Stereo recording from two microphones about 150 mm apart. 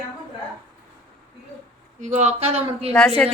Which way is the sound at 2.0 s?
50° right (ahead or behind).